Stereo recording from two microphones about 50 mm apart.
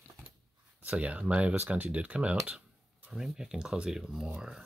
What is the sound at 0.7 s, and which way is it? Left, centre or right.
Speech, right.